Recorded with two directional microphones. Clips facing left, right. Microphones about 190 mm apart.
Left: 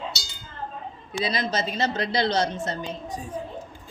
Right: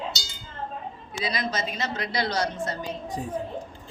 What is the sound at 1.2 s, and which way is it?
Speech, 30° left (ahead or behind).